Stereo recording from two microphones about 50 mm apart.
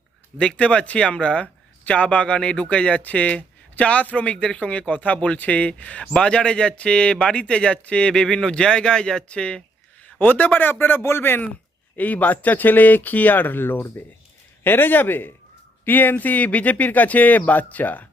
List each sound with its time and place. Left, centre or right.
0.3 s speech: left
10.2 s speech: left
11.9 s speech: left